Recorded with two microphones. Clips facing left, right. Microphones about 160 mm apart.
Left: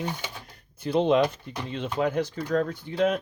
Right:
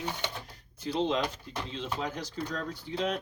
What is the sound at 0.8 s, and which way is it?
Speech, 60° left (ahead or behind).